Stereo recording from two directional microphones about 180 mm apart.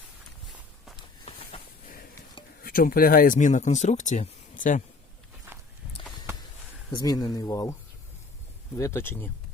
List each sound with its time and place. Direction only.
2.6 s speech: 55° left (ahead or behind)
6.9 s speech: 20° left (ahead or behind)